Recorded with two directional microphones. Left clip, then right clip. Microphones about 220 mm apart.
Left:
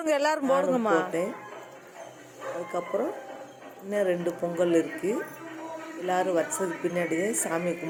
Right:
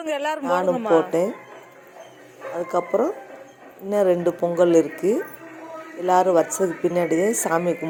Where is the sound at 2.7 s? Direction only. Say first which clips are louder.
Right 9 dB; 30° right (ahead or behind).